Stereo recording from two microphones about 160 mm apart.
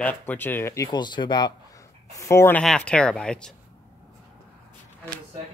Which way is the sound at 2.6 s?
5° left (ahead or behind).